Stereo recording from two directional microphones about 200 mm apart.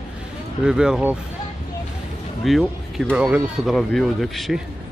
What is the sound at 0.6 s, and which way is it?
Speech, 5° right (ahead or behind).